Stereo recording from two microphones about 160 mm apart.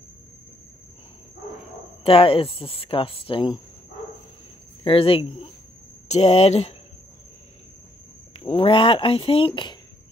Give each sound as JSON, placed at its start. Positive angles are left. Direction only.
{"t": 2.0, "sound": "speech", "side_deg": 35}
{"t": 4.8, "sound": "speech", "side_deg": 35}
{"t": 8.3, "sound": "speech", "side_deg": 40}